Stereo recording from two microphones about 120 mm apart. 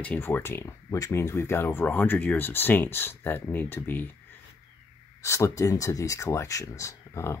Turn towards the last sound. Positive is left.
turn(degrees=25)  # may be behind; listen again after turning